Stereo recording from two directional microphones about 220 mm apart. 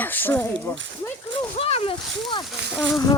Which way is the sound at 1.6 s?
25° left (ahead or behind).